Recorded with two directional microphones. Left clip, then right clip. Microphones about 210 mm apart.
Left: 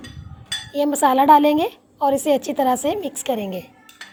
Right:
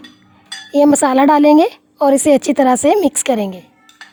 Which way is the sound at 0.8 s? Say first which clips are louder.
Right 6 dB; 30° right (ahead or behind).